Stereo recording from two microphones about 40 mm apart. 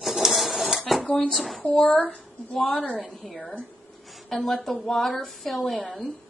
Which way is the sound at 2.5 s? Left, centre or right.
Centre.